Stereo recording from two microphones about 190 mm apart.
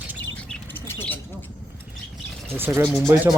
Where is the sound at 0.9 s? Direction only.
10° left (ahead or behind).